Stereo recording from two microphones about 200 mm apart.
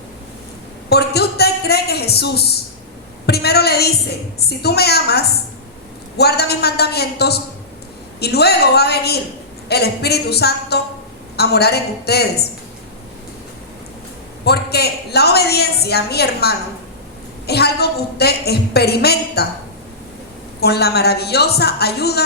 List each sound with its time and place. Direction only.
0.9 s a sound: 55° left (ahead or behind)
3.2 s a woman's voice: 55° left (ahead or behind)
14.4 s a woman's voice: 55° left (ahead or behind)
20.6 s a woman's voice: 55° left (ahead or behind)